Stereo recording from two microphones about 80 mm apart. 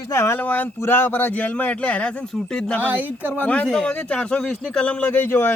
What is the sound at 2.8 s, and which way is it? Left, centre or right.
Speech, right.